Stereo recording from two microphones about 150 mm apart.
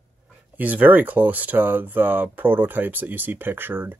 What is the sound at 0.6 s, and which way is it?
Speech, 10° right (ahead or behind).